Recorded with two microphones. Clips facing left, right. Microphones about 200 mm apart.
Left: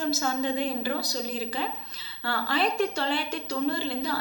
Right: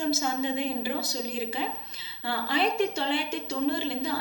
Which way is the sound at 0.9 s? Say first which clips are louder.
Even; 25° right (ahead or behind).